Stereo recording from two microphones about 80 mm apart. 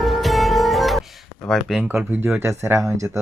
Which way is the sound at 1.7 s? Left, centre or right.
Centre.